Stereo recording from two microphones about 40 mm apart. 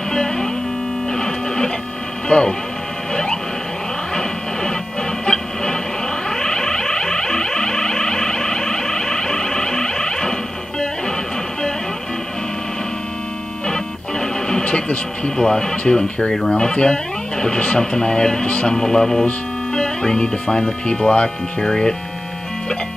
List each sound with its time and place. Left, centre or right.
0.1 s music: centre
1.1 s guitar: left
2.2 s speech: left
4.1 s a sound: centre
5.2 s music: centre
6.2 s a sound: centre
13.7 s music: centre
14.6 s music: left
15.4 s speech: centre
15.7 s speech: left
18.8 s speech: centre